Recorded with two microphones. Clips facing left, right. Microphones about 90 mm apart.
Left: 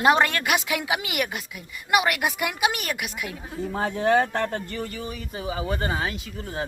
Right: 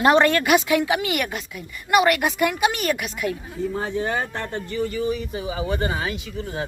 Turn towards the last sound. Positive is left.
turn(degrees=40)  # may be behind; listen again after turning